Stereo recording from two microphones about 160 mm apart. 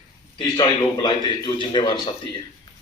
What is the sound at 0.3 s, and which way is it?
A man's voice, 30° left (ahead or behind).